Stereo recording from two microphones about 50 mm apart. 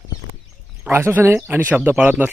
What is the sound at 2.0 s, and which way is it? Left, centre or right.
Speech, right.